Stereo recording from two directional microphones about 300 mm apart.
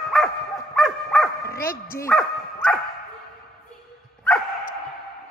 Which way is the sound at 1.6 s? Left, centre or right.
Left.